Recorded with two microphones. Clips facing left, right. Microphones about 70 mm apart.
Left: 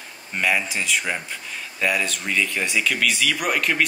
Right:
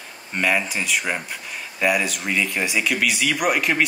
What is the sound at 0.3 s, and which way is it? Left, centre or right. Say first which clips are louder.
Speech: right 1 dB; centre.